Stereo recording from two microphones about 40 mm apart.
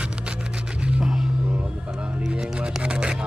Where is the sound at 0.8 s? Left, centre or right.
Right.